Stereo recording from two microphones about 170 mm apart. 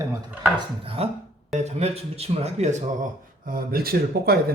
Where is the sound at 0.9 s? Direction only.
35° right (ahead or behind).